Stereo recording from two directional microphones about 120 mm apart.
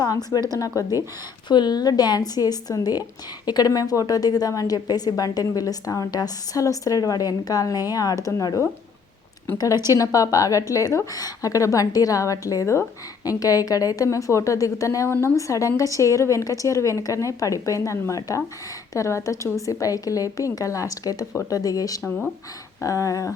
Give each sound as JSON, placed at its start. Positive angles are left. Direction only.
{"t": 0.0, "sound": "speech", "side_deg": 30}
{"t": 1.5, "sound": "a woman's voice", "side_deg": 35}